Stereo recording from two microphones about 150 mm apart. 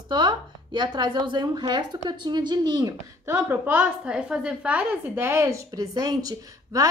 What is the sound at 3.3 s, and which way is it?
A woman's voice, 15° right (ahead or behind).